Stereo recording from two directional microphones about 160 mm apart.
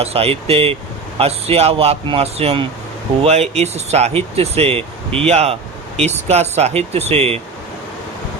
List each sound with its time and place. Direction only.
0.0 s speech: 40° right (ahead or behind)